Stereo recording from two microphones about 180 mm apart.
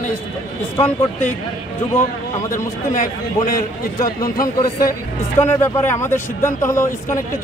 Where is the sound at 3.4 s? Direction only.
20° left (ahead or behind).